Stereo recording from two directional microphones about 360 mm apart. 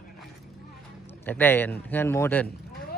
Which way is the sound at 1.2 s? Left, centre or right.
Centre.